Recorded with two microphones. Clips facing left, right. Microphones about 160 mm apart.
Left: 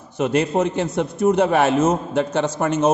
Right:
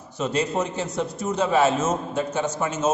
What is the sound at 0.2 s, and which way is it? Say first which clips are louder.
A man's voice: left 5 dB; 60° left (ahead or behind).